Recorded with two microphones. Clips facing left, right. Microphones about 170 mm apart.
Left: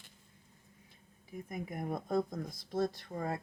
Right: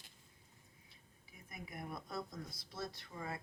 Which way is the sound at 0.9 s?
45° left (ahead or behind).